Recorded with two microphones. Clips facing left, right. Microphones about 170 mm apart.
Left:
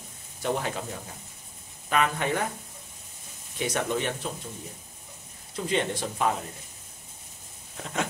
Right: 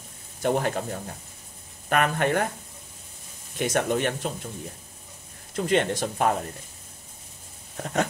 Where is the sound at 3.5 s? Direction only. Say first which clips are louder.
Right 4 dB; 50° right (ahead or behind).